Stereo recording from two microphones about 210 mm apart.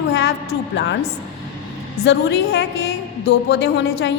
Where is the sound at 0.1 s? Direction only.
55° left (ahead or behind).